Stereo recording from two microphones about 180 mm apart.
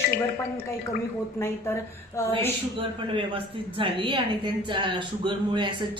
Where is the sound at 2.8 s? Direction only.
30° right (ahead or behind).